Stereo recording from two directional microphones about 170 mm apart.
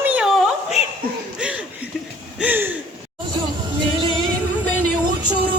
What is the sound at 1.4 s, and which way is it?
Chuckle, 5° right (ahead or behind).